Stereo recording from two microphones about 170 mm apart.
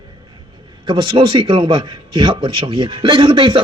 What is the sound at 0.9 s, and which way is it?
A man's voice, 30° right (ahead or behind).